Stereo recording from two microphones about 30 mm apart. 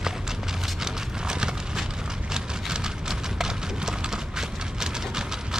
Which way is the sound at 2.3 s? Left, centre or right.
Right.